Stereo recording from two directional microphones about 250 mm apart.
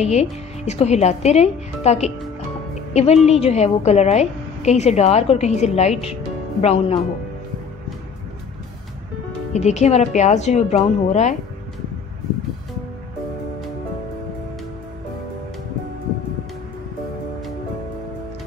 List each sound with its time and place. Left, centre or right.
0.0 s a woman's voice: left
9.5 s a woman's voice: left